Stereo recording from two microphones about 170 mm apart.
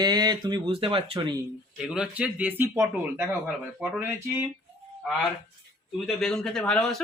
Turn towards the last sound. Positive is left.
turn(degrees=5)  # may be behind; listen again after turning